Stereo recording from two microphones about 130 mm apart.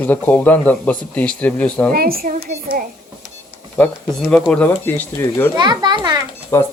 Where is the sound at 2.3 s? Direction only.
90° right.